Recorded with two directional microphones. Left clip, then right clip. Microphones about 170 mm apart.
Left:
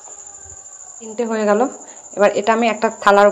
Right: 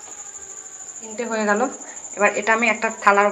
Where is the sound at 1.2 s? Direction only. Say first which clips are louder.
Left 4 dB; 55° left (ahead or behind).